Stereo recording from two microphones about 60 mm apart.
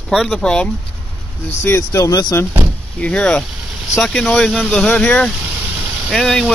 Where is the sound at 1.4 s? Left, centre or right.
Left.